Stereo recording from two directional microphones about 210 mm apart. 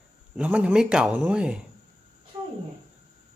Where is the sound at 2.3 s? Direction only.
25° right (ahead or behind).